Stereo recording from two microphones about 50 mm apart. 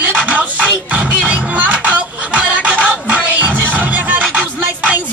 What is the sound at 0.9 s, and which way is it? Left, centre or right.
Music, right.